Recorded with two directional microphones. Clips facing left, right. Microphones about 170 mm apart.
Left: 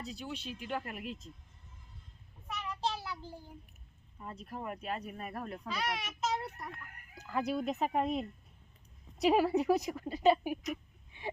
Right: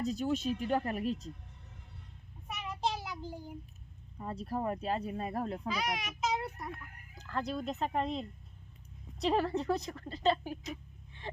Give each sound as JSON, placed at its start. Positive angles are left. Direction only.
{"t": 0.0, "sound": "speech", "side_deg": -45}
{"t": 2.5, "sound": "child singing", "side_deg": -15}
{"t": 4.2, "sound": "speech", "side_deg": -35}
{"t": 5.6, "sound": "a child's voice", "side_deg": 0}
{"t": 7.2, "sound": "a woman's voice", "side_deg": 10}
{"t": 11.2, "sound": "a sound", "side_deg": 10}